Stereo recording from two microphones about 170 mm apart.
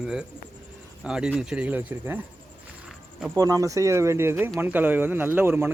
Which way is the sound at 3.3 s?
20° right (ahead or behind).